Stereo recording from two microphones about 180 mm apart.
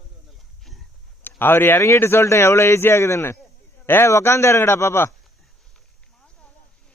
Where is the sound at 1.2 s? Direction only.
10° left (ahead or behind).